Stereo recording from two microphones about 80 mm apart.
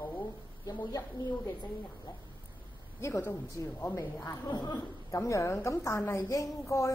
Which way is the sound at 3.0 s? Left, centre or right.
Left.